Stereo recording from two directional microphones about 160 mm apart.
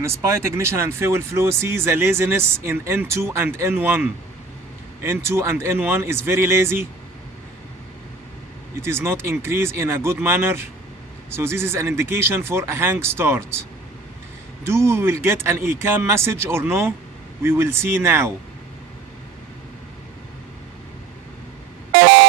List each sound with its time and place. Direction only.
0.0 s speech: 15° right (ahead or behind)
8.7 s speech: 15° right (ahead or behind)